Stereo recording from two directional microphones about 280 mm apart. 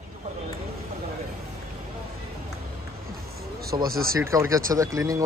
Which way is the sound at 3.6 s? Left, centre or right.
Right.